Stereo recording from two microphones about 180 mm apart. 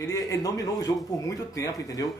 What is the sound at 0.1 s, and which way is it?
Speech, 20° left (ahead or behind).